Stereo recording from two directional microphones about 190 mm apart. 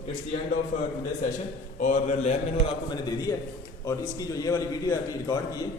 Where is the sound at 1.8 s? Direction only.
40° left (ahead or behind).